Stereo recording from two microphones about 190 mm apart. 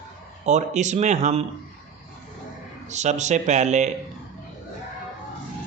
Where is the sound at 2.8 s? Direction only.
40° right (ahead or behind).